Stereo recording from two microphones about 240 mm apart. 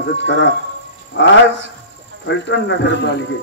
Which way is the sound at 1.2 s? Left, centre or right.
Left.